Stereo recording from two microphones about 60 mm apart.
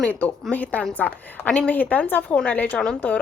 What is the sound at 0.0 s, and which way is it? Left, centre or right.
Speech, left.